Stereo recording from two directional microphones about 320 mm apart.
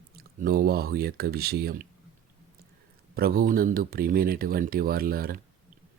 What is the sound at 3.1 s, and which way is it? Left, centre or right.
Speech, right.